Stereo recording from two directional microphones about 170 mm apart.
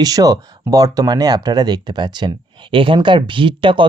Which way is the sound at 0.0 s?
20° right (ahead or behind).